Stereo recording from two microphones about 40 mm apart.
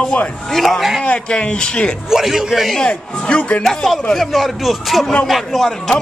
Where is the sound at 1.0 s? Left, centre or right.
Left.